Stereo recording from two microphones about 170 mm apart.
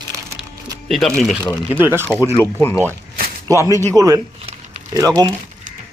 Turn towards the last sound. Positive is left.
turn(degrees=-20)  # may be behind; listen again after turning